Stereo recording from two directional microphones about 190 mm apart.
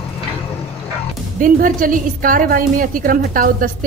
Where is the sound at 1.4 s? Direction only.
45° right (ahead or behind).